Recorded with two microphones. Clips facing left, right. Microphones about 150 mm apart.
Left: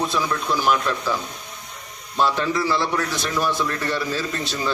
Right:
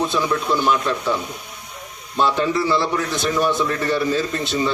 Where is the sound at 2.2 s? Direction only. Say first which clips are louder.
Right 2 dB; centre (ahead or behind).